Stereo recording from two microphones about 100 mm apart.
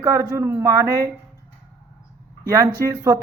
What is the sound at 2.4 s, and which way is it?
Speech, 35° right (ahead or behind).